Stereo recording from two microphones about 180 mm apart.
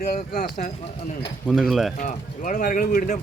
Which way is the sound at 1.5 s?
5° right (ahead or behind).